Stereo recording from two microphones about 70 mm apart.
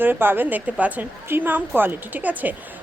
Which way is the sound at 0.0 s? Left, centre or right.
Right.